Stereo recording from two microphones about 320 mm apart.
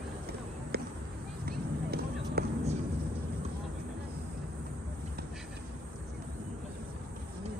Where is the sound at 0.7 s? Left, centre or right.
Right.